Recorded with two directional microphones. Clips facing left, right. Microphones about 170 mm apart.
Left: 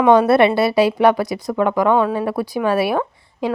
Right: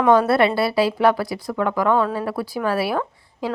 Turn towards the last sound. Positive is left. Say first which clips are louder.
# left 4 dB
turn(degrees=20)  # may be behind; listen again after turning